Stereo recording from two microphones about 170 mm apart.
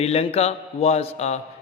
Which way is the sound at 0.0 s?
40° left (ahead or behind).